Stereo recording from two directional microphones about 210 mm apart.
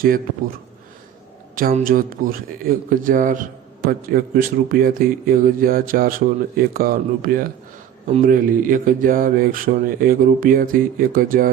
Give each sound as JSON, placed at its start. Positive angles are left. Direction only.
{"t": 1.5, "sound": "speech", "side_deg": -40}